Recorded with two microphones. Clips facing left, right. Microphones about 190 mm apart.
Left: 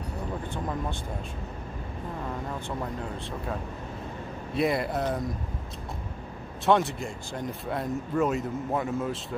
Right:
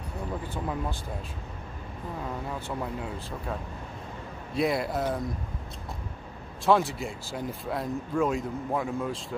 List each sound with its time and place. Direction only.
2.8 s speech: 5° right (ahead or behind)
4.6 s speech: centre (ahead or behind)
6.6 s speech: centre (ahead or behind)